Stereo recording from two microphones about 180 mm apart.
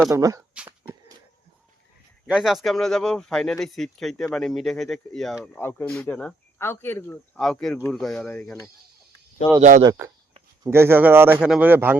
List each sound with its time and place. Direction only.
0.1 s speech: 20° right (ahead or behind)
0.5 s a sound: 5° right (ahead or behind)
2.2 s speech: 5° right (ahead or behind)
5.5 s speech: 15° left (ahead or behind)
9.6 s speech: 45° right (ahead or behind)
10.7 s a man's voice: 15° right (ahead or behind)